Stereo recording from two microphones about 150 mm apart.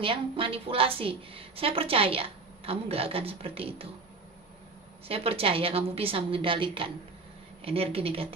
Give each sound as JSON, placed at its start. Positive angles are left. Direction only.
{"t": 0.0, "sound": "a woman's voice", "side_deg": -35}
{"t": 5.0, "sound": "a woman's voice", "side_deg": -40}